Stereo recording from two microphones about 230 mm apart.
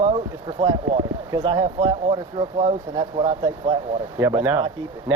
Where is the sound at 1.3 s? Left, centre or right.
Centre.